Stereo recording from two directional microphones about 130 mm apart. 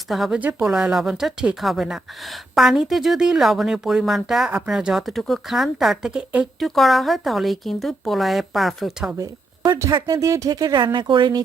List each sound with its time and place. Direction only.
0.1 s speech: 5° right (ahead or behind)
9.1 s a sound: 25° right (ahead or behind)
9.9 s speech: 25° right (ahead or behind)